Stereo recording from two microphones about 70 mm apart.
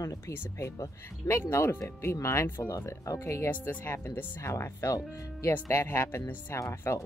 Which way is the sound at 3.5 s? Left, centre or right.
Left.